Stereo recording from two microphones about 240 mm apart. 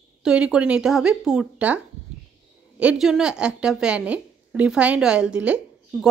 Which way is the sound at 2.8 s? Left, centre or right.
Centre.